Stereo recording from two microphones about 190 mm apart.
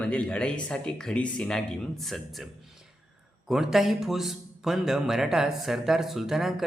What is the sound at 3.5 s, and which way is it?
Speech, centre (ahead or behind).